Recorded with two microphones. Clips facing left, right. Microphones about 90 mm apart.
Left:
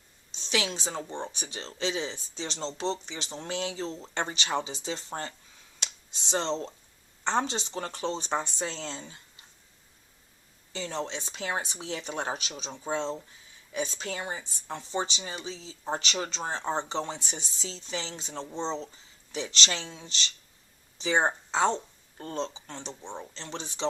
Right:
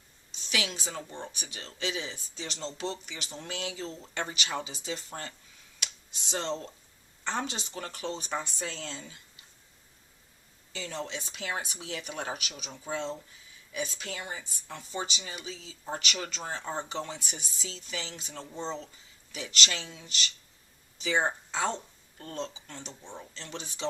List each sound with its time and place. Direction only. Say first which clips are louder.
0.3 s speech: left 3 dB; 25° left (ahead or behind)
10.7 s speech: left 3 dB; 30° left (ahead or behind)